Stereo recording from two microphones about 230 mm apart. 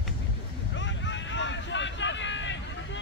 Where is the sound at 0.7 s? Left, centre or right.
Left.